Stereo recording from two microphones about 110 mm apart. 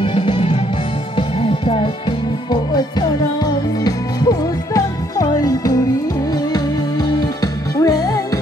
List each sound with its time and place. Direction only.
0.0 s music: 60° left (ahead or behind)
2.5 s music: 40° left (ahead or behind)
7.7 s music: 35° left (ahead or behind)